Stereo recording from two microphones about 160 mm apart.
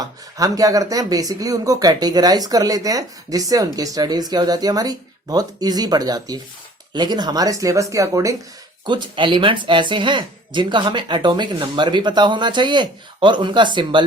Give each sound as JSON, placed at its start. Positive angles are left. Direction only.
{"t": 0.0, "sound": "speech", "side_deg": -20}